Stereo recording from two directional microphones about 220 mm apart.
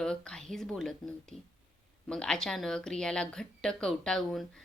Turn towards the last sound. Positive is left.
turn(degrees=0)  # may be behind; listen again after turning